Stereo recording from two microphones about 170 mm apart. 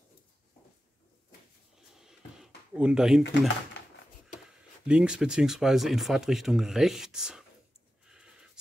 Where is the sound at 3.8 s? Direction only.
90° left.